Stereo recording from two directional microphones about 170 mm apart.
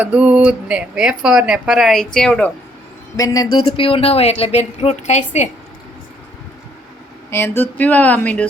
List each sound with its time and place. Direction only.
0.0 s speech: 5° right (ahead or behind)
3.2 s speech: 20° left (ahead or behind); by 5.5 s 45° left (ahead or behind)
7.3 s speech: 15° left (ahead or behind)